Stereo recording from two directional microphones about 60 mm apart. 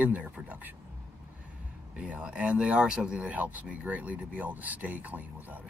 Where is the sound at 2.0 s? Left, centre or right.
Centre.